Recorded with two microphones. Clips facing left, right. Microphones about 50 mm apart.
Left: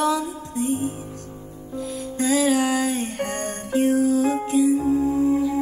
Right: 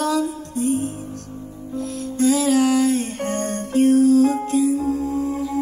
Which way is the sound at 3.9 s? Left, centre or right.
Left.